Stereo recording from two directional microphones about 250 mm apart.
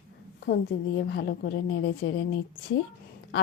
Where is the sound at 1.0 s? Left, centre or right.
Left.